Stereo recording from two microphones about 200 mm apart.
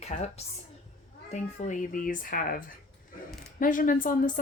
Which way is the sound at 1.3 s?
35° left (ahead or behind).